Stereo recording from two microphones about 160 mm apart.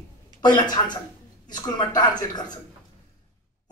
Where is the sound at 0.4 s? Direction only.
25° left (ahead or behind).